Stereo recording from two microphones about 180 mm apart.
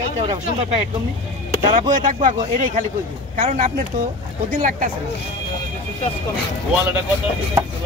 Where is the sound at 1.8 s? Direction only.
45° right (ahead or behind).